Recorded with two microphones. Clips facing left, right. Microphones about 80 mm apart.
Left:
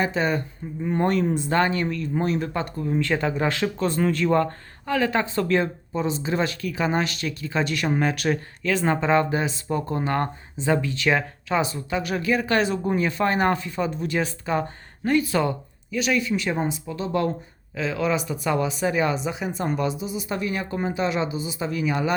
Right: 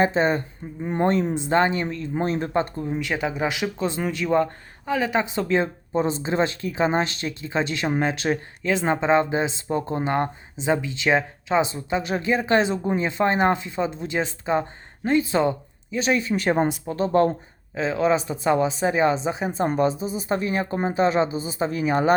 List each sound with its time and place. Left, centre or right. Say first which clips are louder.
0.0 s speech: right 3 dB; right
2.9 s speech: left 4 dB; centre
5.9 s a woman's voice: right 4 dB; right
16.8 s a woman's voice: right 5 dB; right